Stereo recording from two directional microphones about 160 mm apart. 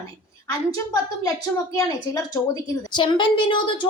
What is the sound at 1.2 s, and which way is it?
A woman's voice, 25° left (ahead or behind).